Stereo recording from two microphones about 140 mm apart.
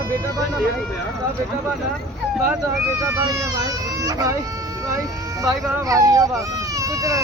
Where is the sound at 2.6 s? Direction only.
20° right (ahead or behind).